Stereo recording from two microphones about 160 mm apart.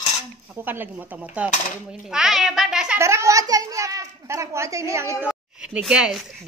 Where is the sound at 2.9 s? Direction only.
20° right (ahead or behind).